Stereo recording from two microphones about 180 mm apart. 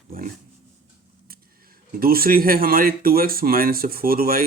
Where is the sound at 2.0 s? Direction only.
55° right (ahead or behind).